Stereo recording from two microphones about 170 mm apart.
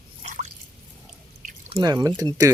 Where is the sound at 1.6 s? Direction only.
25° right (ahead or behind).